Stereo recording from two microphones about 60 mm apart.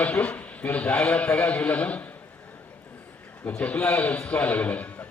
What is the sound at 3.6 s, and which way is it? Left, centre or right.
A man's voice, left.